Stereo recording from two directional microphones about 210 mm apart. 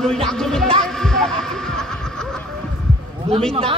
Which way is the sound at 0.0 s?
Centre (ahead or behind).